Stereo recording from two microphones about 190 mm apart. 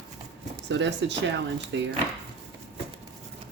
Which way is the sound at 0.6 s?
70° right (ahead or behind).